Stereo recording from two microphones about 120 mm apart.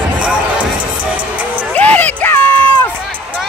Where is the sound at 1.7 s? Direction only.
15° left (ahead or behind).